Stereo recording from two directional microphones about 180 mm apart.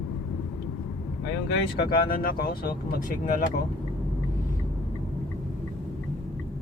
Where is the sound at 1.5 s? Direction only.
60° left (ahead or behind).